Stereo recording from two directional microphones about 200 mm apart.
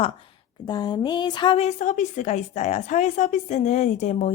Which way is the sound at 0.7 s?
20° left (ahead or behind).